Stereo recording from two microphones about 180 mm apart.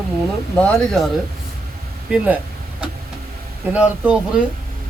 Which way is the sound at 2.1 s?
5° right (ahead or behind).